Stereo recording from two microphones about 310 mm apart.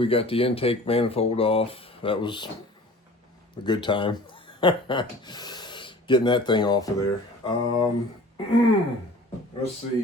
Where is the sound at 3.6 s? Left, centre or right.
Centre.